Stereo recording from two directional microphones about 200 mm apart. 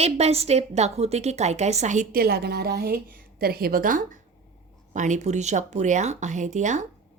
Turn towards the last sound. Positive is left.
turn(degrees=-35)  # may be behind; listen again after turning